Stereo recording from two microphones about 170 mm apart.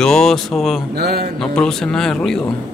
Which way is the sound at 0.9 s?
70° right (ahead or behind).